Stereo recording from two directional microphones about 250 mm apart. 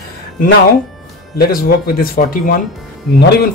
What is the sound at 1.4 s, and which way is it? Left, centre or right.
Speech, left.